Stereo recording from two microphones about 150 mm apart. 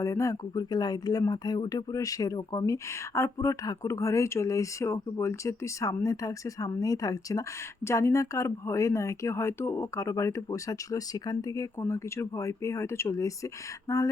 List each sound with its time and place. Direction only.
0.0 s speech: 20° left (ahead or behind)